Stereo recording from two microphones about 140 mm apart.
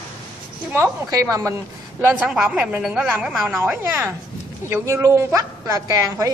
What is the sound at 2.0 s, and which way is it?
A woman's voice, 10° right (ahead or behind).